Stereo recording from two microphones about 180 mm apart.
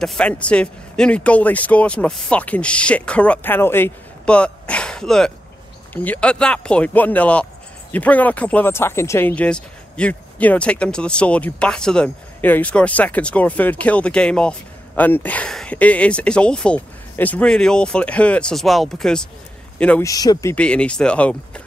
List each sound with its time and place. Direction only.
0.0 s speech: 5° left (ahead or behind)
20.1 s speech: 20° left (ahead or behind)
20.5 s speech: 5° left (ahead or behind)